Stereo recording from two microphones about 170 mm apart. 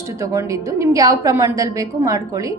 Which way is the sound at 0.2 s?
20° right (ahead or behind).